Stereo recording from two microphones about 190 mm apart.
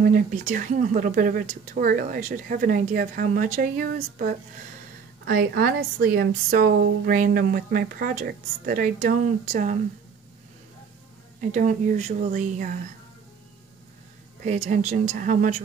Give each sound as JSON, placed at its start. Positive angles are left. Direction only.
{"t": 0.0, "sound": "a woman's voice", "side_deg": -45}
{"t": 11.5, "sound": "a woman's voice", "side_deg": -40}
{"t": 14.4, "sound": "a woman's voice", "side_deg": -40}